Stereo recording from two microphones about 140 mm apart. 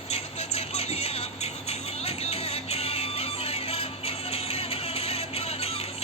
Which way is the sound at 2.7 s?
45° left (ahead or behind).